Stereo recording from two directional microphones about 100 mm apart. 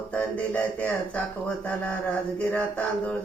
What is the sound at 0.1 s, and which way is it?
Speech, 10° left (ahead or behind).